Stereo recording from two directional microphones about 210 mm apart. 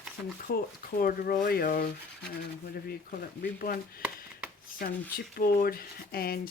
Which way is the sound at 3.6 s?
45° left (ahead or behind).